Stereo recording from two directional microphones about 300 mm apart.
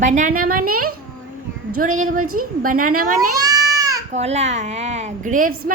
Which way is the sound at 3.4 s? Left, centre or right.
Centre.